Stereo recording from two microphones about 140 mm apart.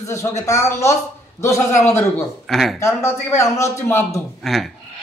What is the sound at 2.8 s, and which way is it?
A man's voice, 20° left (ahead or behind).